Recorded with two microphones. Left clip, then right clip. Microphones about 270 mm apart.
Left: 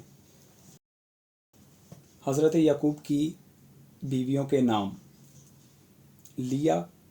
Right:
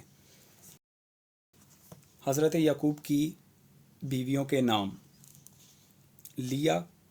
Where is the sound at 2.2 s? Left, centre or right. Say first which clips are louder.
Left 3 dB; right.